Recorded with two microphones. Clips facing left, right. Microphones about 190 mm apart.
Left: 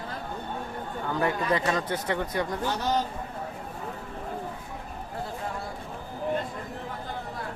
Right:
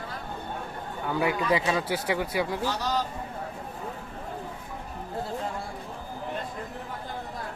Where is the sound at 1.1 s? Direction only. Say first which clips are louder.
Right 1 dB; 10° right (ahead or behind).